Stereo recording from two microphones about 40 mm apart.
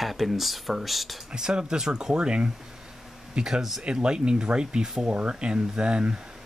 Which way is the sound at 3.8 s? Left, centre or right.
Right.